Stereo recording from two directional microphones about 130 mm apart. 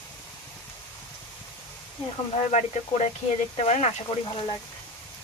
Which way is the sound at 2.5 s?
55° left (ahead or behind).